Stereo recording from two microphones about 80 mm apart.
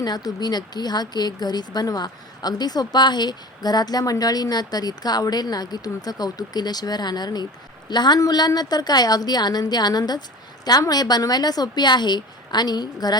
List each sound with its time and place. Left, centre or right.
0.0 s speech: left